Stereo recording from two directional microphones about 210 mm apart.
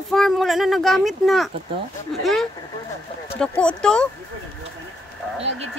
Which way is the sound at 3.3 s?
5° left (ahead or behind).